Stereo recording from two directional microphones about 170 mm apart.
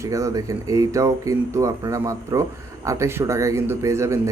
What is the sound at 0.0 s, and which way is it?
Speech, 20° right (ahead or behind).